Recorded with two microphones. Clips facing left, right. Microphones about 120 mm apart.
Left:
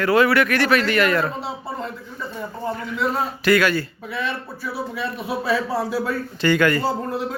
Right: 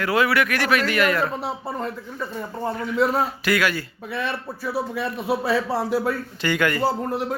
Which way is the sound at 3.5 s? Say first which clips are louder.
Left 7 dB; 10° right (ahead or behind).